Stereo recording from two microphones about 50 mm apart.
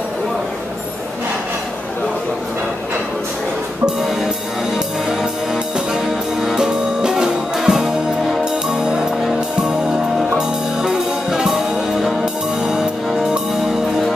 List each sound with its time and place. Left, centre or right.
4.7 s music: centre
10.3 s music: centre
12.6 s music: centre